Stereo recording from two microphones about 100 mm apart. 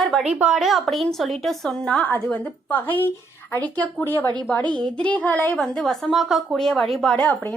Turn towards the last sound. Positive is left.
turn(degrees=15)  # may be behind; listen again after turning